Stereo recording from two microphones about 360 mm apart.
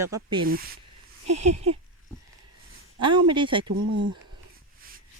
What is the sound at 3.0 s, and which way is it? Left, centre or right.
Speech, centre.